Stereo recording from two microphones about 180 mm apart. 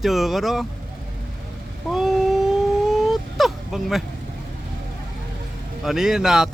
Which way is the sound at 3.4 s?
Centre (ahead or behind).